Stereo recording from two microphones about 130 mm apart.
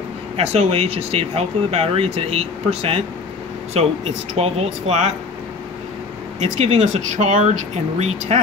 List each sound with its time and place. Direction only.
0.4 s speech: 55° right (ahead or behind)
6.4 s speech: 60° right (ahead or behind)